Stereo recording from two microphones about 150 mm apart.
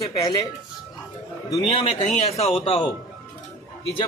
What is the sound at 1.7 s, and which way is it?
Speech, 45° left (ahead or behind).